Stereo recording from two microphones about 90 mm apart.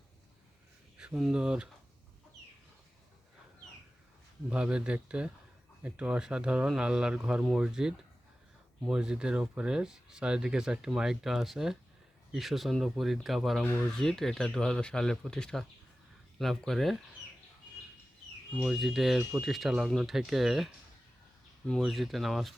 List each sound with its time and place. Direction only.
0.9 s speech: 10° right (ahead or behind)
4.4 s speech: 10° right (ahead or behind)
18.6 s speech: 5° right (ahead or behind)
21.8 s speech: centre (ahead or behind)